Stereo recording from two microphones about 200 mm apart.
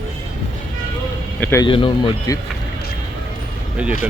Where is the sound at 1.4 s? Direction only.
10° left (ahead or behind).